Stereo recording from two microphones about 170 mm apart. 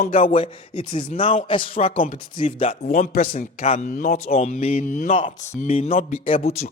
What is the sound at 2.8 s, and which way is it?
Speech, 60° left (ahead or behind).